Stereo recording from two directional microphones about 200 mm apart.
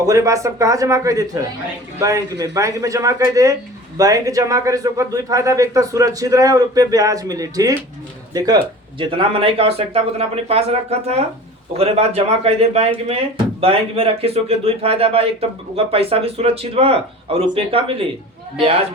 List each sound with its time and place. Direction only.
0.0 s a man's voice: 15° right (ahead or behind)